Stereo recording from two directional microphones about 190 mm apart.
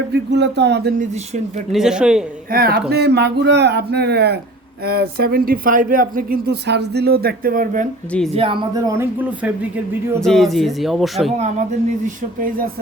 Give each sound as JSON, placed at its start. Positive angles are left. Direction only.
{"t": 0.1, "sound": "speech", "side_deg": -65}
{"t": 0.9, "sound": "speech", "side_deg": -35}
{"t": 1.7, "sound": "speech", "side_deg": -5}
{"t": 2.5, "sound": "speech", "side_deg": -50}
{"t": 8.4, "sound": "speech", "side_deg": -30}
{"t": 8.9, "sound": "speech", "side_deg": -10}
{"t": 11.3, "sound": "speech", "side_deg": -35}